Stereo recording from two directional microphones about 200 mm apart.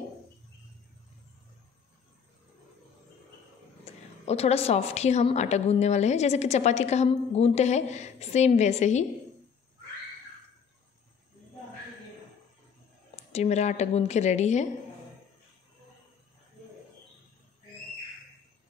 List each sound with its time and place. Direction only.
3.8 s a woman's voice: 30° left (ahead or behind)
13.1 s a woman's voice: 35° left (ahead or behind)